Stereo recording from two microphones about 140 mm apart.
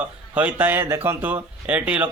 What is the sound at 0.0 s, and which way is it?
Speech, 10° right (ahead or behind).